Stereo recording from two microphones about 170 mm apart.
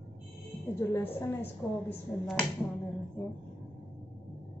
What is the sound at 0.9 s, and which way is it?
Speech, 15° left (ahead or behind).